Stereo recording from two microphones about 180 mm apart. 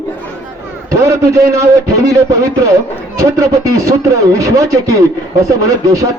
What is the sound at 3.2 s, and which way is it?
Speech, 15° right (ahead or behind).